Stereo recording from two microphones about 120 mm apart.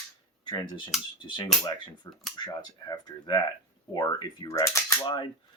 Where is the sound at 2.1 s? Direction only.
30° left (ahead or behind).